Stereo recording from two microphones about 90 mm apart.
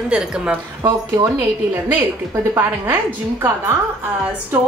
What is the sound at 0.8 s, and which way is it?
Speech, 45° right (ahead or behind).